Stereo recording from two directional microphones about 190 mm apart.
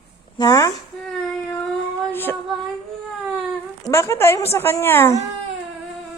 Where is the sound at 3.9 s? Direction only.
15° left (ahead or behind).